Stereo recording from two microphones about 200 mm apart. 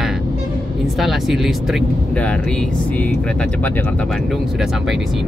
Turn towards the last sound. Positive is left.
turn(degrees=0)  # may be behind; listen again after turning